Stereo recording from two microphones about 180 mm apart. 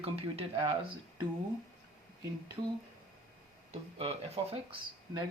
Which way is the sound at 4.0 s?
35° right (ahead or behind).